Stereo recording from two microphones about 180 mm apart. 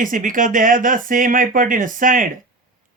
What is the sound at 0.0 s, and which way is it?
Speech, 50° right (ahead or behind).